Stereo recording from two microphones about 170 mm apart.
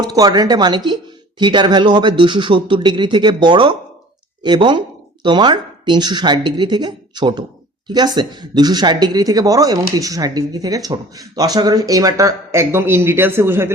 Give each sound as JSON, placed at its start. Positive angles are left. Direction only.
{"t": 0.0, "sound": "speech", "side_deg": -25}